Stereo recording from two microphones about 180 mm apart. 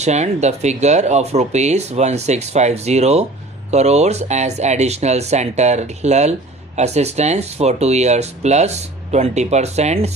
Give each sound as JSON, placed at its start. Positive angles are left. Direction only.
{"t": 0.0, "sound": "speech", "side_deg": -40}